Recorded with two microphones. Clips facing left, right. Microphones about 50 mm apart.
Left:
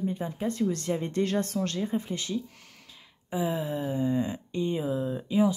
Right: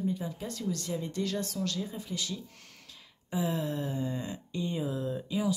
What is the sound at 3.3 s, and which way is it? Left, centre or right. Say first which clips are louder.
Speech: left 3 dB; centre.